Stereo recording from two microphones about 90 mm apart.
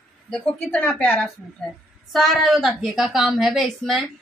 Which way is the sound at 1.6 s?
5° left (ahead or behind).